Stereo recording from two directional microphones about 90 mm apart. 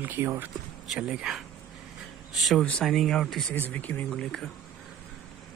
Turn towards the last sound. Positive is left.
turn(degrees=5)  # may be behind; listen again after turning